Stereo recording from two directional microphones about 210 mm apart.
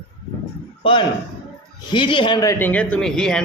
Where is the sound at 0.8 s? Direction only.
25° left (ahead or behind).